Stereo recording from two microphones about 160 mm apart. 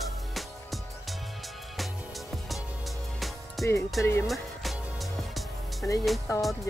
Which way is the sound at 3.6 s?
Centre (ahead or behind).